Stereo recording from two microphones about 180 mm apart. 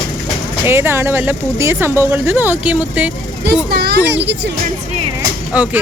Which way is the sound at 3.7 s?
60° right (ahead or behind).